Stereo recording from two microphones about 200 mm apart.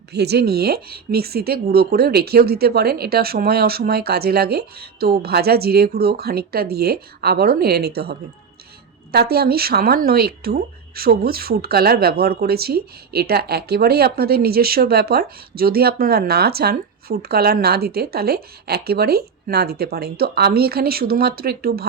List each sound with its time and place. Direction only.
0.1 s speech: 55° right (ahead or behind)
9.1 s speech: 50° right (ahead or behind)